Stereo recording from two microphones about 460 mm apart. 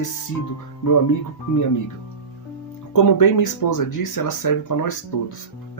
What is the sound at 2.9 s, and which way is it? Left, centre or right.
Speech, left.